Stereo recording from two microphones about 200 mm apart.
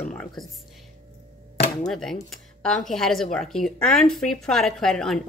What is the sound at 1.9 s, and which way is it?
Speech, centre (ahead or behind).